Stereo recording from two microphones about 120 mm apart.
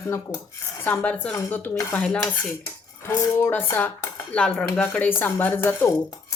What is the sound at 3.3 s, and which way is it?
Speech, 20° left (ahead or behind).